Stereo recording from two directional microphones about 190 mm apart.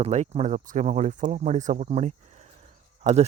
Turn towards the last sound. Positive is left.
turn(degrees=-35)  # may be behind; listen again after turning